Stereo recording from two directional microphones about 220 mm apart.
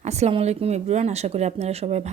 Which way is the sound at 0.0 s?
30° right (ahead or behind).